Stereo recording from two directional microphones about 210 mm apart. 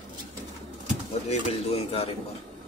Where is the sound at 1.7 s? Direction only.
30° left (ahead or behind).